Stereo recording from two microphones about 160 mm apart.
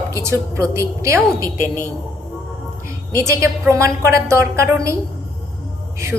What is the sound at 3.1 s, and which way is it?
A woman's voice, 20° right (ahead or behind).